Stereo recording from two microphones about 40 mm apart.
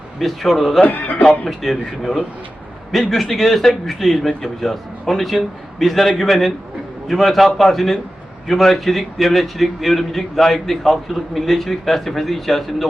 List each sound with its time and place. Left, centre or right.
0.2 s a man's voice: centre
0.9 s speech: left
1.2 s a man's voice: centre